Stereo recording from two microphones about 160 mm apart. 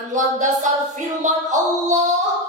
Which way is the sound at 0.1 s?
50° right (ahead or behind).